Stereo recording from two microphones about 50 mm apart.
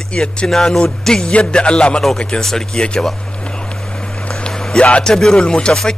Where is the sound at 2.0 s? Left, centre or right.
Centre.